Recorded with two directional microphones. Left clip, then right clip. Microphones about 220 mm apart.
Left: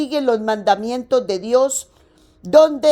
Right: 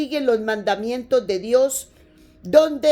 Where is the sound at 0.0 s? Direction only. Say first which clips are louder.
Left 2 dB; 25° left (ahead or behind).